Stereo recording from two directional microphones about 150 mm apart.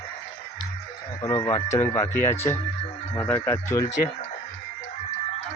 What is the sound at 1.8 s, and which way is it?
Speech, 15° left (ahead or behind).